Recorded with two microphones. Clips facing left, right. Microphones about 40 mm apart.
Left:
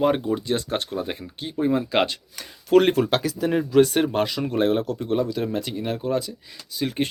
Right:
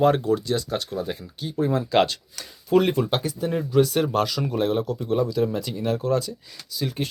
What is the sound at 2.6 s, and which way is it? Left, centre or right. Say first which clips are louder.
Speech: left 3 dB; left.